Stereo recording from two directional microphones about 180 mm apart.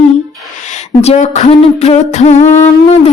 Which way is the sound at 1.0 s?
40° left (ahead or behind).